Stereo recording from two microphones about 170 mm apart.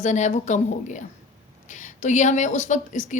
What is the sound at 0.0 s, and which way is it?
Speech, 45° left (ahead or behind).